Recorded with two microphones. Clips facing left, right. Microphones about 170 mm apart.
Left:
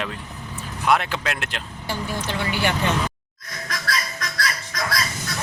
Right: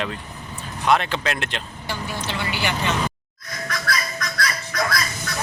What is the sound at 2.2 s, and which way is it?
Speech, 50° left (ahead or behind).